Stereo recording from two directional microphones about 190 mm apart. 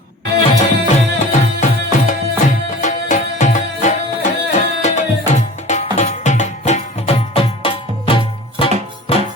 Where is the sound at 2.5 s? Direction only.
45° left (ahead or behind).